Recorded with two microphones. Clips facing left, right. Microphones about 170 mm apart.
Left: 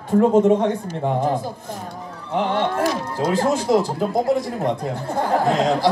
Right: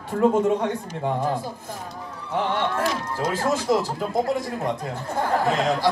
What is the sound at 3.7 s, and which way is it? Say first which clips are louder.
Speech: left 4 dB; 20° left (ahead or behind).